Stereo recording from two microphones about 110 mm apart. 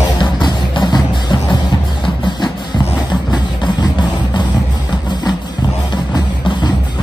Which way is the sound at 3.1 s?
40° left (ahead or behind).